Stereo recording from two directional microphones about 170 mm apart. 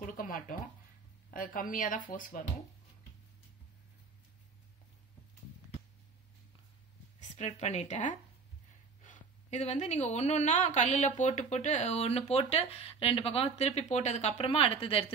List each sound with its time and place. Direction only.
0.0 s a sound: 55° left (ahead or behind)
1.3 s speech: 50° left (ahead or behind)
7.2 s a woman's voice: 40° left (ahead or behind)